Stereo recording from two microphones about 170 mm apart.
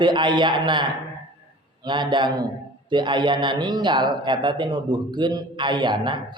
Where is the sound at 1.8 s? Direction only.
25° right (ahead or behind).